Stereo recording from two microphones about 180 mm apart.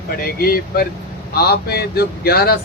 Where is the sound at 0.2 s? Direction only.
55° left (ahead or behind).